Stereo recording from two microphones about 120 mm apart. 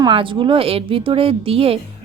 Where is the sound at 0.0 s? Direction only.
45° right (ahead or behind).